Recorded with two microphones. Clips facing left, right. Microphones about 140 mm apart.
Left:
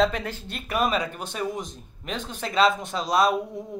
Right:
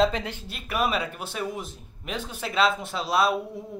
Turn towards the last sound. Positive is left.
turn(degrees=-5)  # may be behind; listen again after turning